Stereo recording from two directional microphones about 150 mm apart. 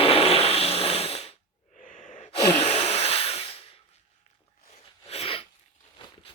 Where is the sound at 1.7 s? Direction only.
60° left (ahead or behind).